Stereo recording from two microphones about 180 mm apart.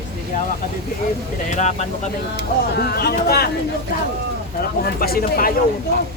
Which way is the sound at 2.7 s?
65° left (ahead or behind).